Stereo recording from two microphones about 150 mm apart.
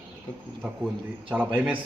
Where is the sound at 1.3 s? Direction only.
10° right (ahead or behind).